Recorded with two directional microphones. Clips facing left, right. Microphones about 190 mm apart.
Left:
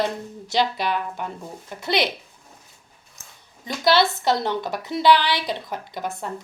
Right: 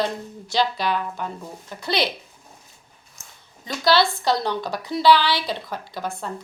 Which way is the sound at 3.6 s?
20° left (ahead or behind).